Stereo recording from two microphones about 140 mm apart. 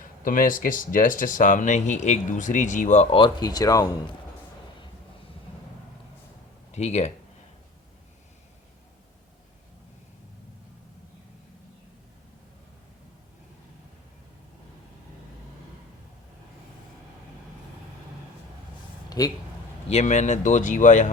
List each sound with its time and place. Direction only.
0.0 s speech: 75° left (ahead or behind); by 3.2 s 55° left (ahead or behind)
3.2 s speech: 30° left (ahead or behind)
6.7 s speech: 50° left (ahead or behind)
19.2 s speech: 25° left (ahead or behind)
19.9 s speech: 55° left (ahead or behind)